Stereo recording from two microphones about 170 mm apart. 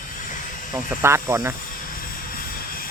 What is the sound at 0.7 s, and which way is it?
Speech, 15° right (ahead or behind).